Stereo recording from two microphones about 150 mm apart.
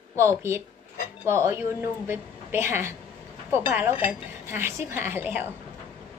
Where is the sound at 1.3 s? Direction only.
20° right (ahead or behind).